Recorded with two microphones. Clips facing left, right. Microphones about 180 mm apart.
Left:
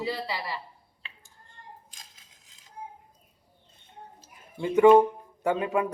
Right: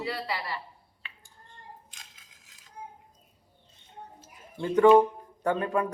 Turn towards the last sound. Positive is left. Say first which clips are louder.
# left 1 dB
turn(degrees=10)  # may be behind; listen again after turning